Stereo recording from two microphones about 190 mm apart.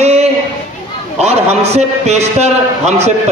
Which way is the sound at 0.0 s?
35° right (ahead or behind).